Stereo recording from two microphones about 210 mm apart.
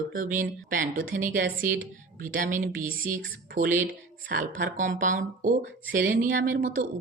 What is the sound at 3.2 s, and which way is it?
Speech, 50° right (ahead or behind).